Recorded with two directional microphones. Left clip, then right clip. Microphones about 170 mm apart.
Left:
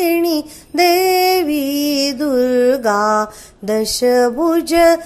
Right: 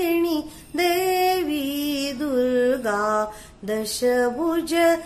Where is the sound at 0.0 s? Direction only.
40° left (ahead or behind).